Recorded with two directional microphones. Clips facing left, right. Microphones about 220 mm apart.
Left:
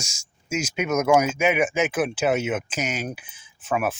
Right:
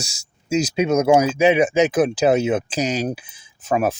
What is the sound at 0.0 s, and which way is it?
Speech, 35° right (ahead or behind).